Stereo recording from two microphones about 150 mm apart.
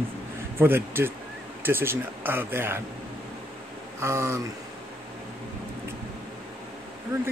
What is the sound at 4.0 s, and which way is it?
Speech, 20° right (ahead or behind).